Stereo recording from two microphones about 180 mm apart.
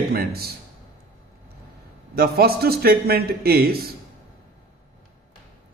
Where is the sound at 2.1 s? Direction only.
60° right (ahead or behind).